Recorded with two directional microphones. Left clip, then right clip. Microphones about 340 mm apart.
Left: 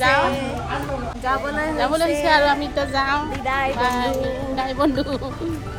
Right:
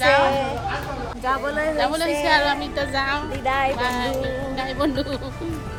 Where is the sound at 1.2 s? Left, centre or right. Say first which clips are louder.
Even; centre.